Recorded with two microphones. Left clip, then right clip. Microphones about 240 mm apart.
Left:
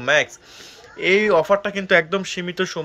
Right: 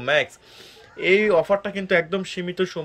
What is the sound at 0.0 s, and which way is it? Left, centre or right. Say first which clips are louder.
Speech: left 3 dB; centre.